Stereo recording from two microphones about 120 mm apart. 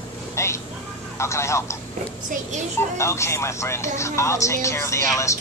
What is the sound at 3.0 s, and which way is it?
Speech, 25° left (ahead or behind).